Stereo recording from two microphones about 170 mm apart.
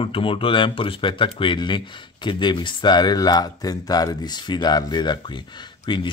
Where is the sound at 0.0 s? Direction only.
30° left (ahead or behind).